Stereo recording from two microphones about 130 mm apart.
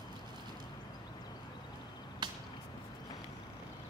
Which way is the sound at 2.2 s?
35° right (ahead or behind).